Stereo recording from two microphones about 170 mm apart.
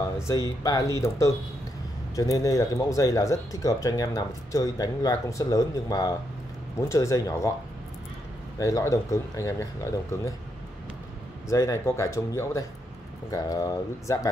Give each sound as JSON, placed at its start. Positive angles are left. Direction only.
{"t": 0.3, "sound": "speech", "side_deg": 20}
{"t": 8.5, "sound": "speech", "side_deg": 20}
{"t": 11.4, "sound": "speech", "side_deg": 15}